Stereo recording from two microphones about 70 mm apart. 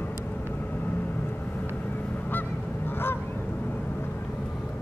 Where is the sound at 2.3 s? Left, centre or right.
Left.